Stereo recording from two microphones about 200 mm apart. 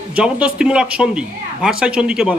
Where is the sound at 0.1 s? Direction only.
5° right (ahead or behind).